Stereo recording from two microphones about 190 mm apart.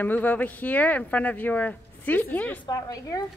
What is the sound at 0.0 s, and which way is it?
Speech, 10° left (ahead or behind).